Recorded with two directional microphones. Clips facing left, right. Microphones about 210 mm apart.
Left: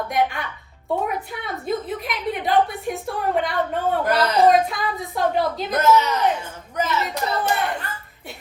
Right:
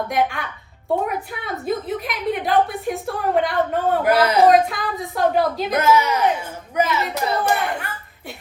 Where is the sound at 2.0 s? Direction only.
Centre (ahead or behind).